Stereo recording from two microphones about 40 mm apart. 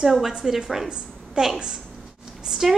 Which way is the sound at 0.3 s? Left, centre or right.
Centre.